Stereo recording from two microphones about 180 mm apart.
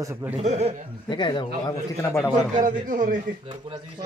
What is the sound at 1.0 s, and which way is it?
Speech, 25° left (ahead or behind).